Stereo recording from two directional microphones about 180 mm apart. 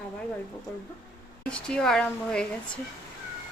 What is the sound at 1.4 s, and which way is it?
A woman's voice, 5° left (ahead or behind).